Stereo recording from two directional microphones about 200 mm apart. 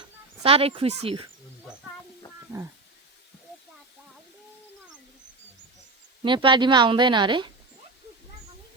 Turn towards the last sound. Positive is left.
turn(degrees=-25)  # may be behind; listen again after turning